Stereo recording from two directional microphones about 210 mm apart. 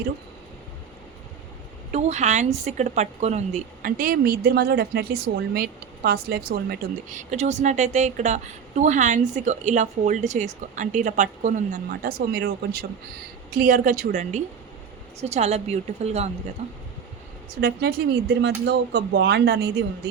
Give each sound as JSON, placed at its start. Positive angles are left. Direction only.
{"t": 1.9, "sound": "a woman's voice", "side_deg": -30}
{"t": 17.5, "sound": "speech", "side_deg": -50}